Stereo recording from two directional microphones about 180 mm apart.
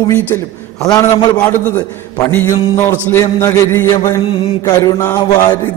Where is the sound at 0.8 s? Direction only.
20° left (ahead or behind).